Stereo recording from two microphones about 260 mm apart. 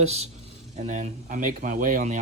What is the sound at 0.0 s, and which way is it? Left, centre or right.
Speech, right.